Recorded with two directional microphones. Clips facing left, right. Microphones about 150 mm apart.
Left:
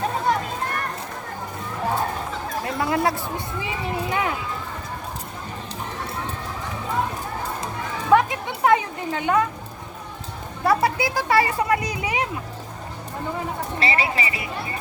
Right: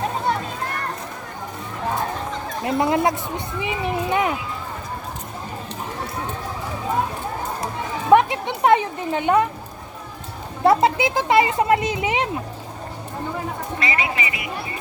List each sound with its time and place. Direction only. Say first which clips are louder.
2.6 s speech: right 4 dB; 20° right (ahead or behind)
8.1 s a sound: right 3 dB; 25° right (ahead or behind)
10.6 s speech: right 4 dB; 25° right (ahead or behind)
13.7 s speech: left 1 dB; 30° left (ahead or behind)